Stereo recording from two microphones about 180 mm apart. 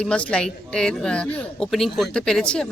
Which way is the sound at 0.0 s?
5° left (ahead or behind).